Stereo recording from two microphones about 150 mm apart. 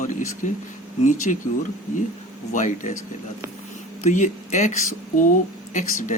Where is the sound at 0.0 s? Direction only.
55° left (ahead or behind).